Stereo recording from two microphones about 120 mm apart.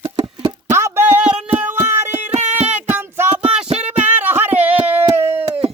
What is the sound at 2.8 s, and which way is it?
Music, 15° right (ahead or behind).